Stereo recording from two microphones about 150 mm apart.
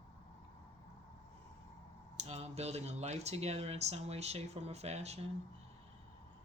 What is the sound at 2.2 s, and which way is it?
Speech, 40° right (ahead or behind).